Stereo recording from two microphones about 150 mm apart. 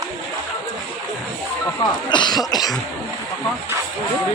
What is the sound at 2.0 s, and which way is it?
Cough, 30° left (ahead or behind).